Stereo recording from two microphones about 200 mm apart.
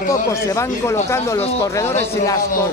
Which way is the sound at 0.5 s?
15° left (ahead or behind).